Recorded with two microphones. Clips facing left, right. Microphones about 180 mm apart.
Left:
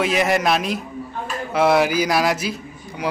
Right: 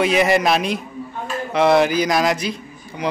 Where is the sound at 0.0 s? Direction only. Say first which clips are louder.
Right 3 dB; centre (ahead or behind).